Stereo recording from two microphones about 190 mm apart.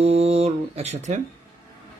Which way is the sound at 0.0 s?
35° right (ahead or behind).